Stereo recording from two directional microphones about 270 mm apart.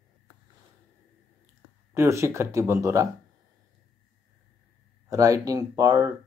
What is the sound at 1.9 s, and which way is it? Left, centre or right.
Speech, centre.